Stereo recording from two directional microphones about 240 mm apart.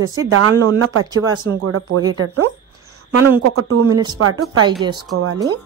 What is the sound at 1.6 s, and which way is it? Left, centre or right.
Speech, right.